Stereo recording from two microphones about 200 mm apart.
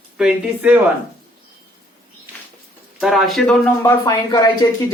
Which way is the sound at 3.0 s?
Centre (ahead or behind).